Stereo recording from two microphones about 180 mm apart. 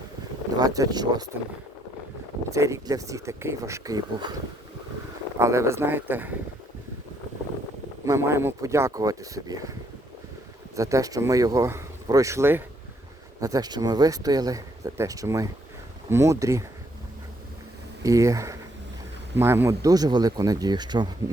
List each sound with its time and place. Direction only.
0.6 s speech: 20° right (ahead or behind)
2.5 s speech: 15° right (ahead or behind)
5.4 s speech: 15° right (ahead or behind)
8.0 s speech: 15° right (ahead or behind)
10.8 s speech: 15° right (ahead or behind)
18.0 s speech: 20° right (ahead or behind)